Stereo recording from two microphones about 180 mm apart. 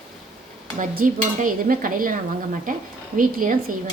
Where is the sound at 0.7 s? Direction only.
50° right (ahead or behind).